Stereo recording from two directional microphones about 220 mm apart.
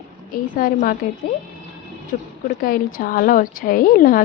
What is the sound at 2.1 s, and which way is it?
A woman's voice, 35° left (ahead or behind).